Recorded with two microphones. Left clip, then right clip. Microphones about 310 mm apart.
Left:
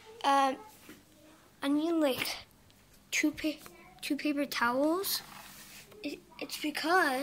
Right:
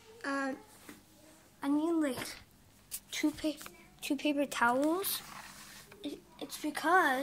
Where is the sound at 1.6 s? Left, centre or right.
Centre.